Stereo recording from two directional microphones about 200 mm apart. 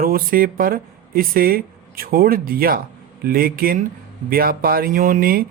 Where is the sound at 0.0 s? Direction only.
45° right (ahead or behind).